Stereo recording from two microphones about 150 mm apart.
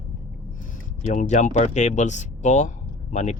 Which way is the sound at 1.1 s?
55° left (ahead or behind).